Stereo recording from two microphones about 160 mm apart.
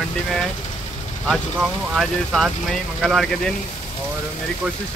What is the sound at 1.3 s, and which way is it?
Speech, centre (ahead or behind).